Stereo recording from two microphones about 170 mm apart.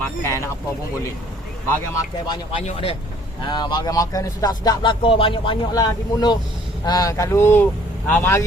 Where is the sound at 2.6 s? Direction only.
40° left (ahead or behind).